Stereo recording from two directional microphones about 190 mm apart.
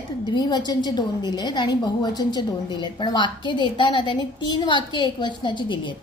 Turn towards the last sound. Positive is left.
turn(degrees=25)  # may be behind; listen again after turning